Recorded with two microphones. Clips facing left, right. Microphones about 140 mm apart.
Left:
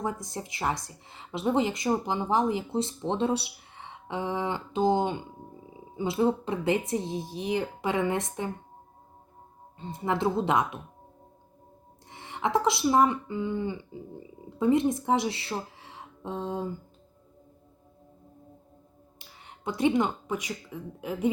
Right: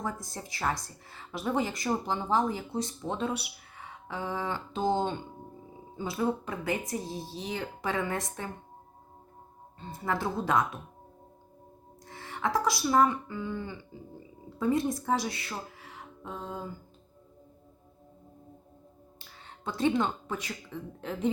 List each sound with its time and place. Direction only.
0.0 s speech: 20° left (ahead or behind)
9.8 s speech: 20° left (ahead or behind)
12.0 s speech: 20° left (ahead or behind)
19.5 s a woman's voice: 15° left (ahead or behind)